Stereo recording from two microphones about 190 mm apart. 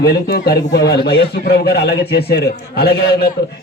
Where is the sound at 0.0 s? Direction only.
55° left (ahead or behind).